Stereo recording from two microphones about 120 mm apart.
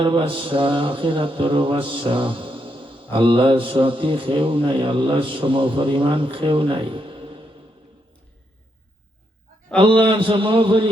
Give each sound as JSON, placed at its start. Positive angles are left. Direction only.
{"t": 0.0, "sound": "mantra", "side_deg": -45}
{"t": 9.7, "sound": "mantra", "side_deg": -45}